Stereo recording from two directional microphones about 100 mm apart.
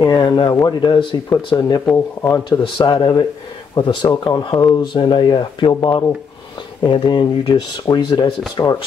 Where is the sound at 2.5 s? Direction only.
50° left (ahead or behind).